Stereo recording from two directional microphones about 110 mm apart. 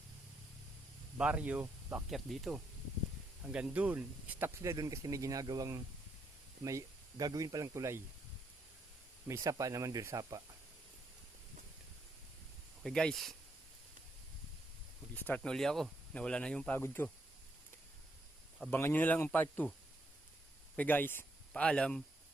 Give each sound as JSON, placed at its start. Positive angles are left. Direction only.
{"t": 1.2, "sound": "speech", "side_deg": -10}
{"t": 2.0, "sound": "speech", "side_deg": 0}
{"t": 3.4, "sound": "speech", "side_deg": -10}
{"t": 9.2, "sound": "speech", "side_deg": -25}
{"t": 12.8, "sound": "speech", "side_deg": 5}
{"t": 15.1, "sound": "speech", "side_deg": 15}
{"t": 16.7, "sound": "speech", "side_deg": 20}
{"t": 18.7, "sound": "speech", "side_deg": 20}
{"t": 20.7, "sound": "speech", "side_deg": 15}